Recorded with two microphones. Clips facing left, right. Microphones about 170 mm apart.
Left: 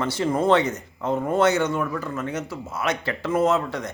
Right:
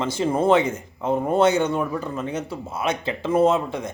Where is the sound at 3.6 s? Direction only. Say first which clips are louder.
Right 1 dB; 10° right (ahead or behind).